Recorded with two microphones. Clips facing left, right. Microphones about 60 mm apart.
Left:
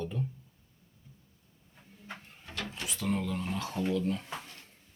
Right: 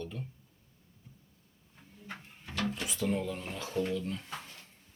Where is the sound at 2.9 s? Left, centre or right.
Centre.